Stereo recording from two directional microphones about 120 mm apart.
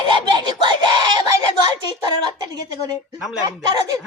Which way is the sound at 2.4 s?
35° right (ahead or behind).